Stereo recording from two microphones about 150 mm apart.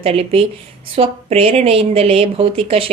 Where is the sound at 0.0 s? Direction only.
45° right (ahead or behind).